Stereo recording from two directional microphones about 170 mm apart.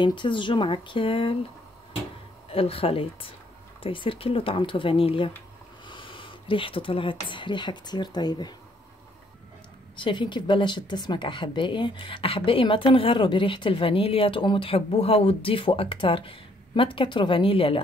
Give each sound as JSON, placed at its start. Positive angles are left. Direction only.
{"t": 0.0, "sound": "speech", "side_deg": 30}
{"t": 2.5, "sound": "a woman's voice", "side_deg": 35}
{"t": 9.9, "sound": "a woman's voice", "side_deg": 30}